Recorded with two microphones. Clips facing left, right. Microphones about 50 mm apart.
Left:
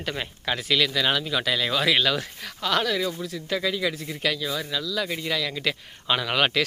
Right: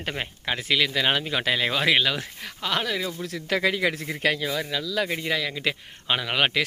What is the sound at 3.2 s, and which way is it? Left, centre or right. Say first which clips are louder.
Speech: right 3 dB; right.